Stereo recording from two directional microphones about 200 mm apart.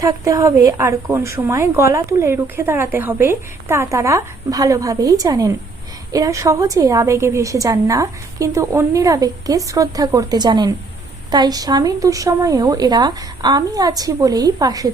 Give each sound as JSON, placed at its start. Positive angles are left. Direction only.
{"t": 0.0, "sound": "a woman's voice", "side_deg": -15}